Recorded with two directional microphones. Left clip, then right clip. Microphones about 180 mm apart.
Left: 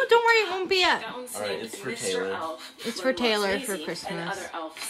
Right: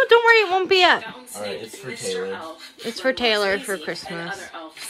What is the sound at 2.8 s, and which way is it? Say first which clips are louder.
A woman's voice: right 4 dB; 5° left (ahead or behind).